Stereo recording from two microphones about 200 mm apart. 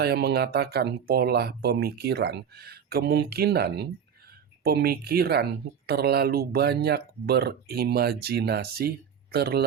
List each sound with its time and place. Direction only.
0.0 s speech: 55° right (ahead or behind)